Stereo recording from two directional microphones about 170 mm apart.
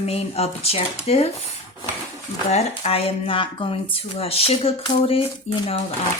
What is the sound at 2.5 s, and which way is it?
Speech, 35° left (ahead or behind).